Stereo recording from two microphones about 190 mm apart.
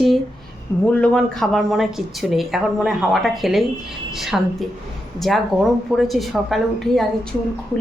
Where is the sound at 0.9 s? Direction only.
5° left (ahead or behind).